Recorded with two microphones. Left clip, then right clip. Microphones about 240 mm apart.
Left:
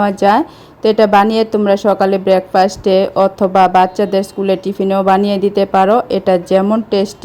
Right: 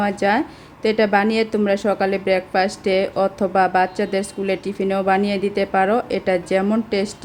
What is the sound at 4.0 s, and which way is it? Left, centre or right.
Speech, centre.